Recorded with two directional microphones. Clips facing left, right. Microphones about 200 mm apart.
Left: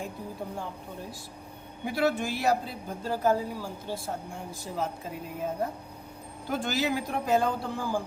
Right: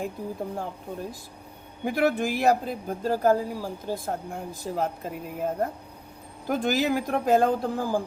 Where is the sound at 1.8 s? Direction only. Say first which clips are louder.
Right 3 dB; 50° right (ahead or behind).